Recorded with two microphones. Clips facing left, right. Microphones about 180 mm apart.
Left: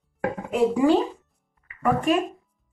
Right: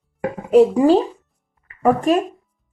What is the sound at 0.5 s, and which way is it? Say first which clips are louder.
Speech: right 8 dB; 35° right (ahead or behind).